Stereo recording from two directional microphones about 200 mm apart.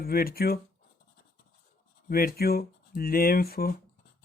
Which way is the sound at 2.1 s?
50° left (ahead or behind).